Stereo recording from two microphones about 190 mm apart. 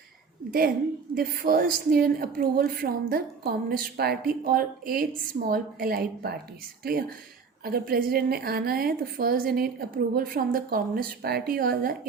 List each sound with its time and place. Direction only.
1.1 s a woman's voice: 50° right (ahead or behind)